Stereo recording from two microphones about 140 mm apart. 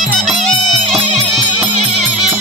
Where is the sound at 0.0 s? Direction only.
Centre (ahead or behind).